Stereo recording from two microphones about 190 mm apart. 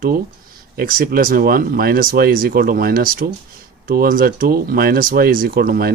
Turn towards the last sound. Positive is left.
turn(degrees=-50)  # may be behind; listen again after turning